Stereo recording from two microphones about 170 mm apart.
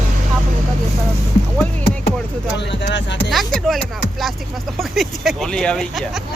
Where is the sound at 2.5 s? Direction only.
90° left.